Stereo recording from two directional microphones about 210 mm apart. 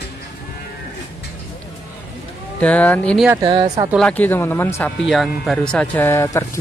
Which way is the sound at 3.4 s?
20° right (ahead or behind).